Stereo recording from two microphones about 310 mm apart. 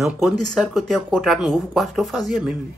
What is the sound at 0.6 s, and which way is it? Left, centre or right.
Speech, centre.